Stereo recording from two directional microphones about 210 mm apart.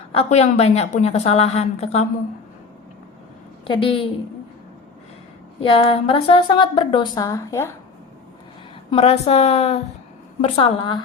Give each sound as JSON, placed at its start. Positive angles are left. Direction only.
{"t": 0.2, "sound": "a woman's voice", "side_deg": 30}
{"t": 3.6, "sound": "a woman's voice", "side_deg": 25}
{"t": 5.6, "sound": "a woman's voice", "side_deg": 25}
{"t": 8.9, "sound": "a woman's voice", "side_deg": 30}